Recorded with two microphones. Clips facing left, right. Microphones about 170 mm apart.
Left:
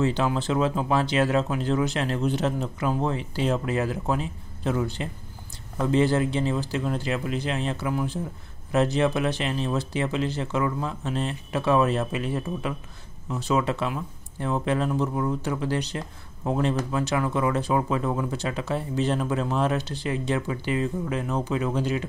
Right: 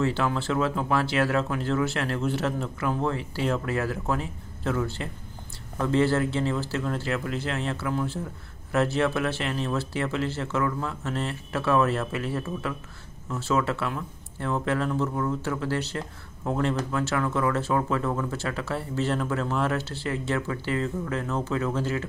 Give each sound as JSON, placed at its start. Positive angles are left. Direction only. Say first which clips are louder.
{"t": 0.0, "sound": "speech", "louder": "left 2 dB", "side_deg": 20}